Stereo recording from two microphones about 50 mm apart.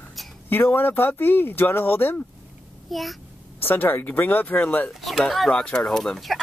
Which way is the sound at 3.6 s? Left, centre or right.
Left.